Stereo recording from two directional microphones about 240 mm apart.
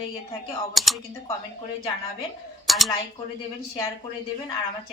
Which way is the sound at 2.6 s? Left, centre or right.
Centre.